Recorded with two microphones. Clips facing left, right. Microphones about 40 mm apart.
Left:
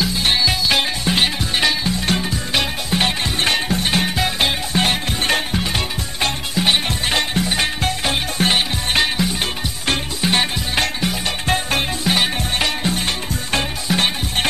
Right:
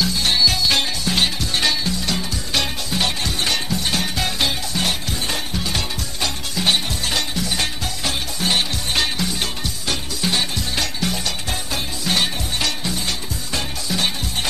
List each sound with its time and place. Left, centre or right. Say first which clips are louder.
0.0 s music: left 1 dB; left
8.5 s music: left 3 dB; left
11.4 s music: left 7 dB; left
12.0 s music: even; centre
12.5 s music: left 4 dB; left